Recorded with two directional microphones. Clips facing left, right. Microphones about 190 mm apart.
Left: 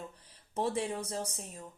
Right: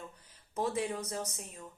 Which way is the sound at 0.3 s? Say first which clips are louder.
Left 1 dB; 30° left (ahead or behind).